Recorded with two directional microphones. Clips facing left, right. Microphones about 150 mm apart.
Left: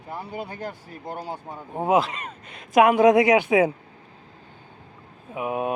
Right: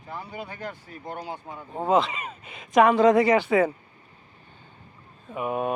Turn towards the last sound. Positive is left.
turn(degrees=5)  # may be behind; listen again after turning